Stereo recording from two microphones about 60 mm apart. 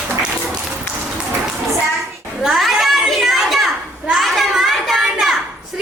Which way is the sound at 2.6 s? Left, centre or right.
Centre.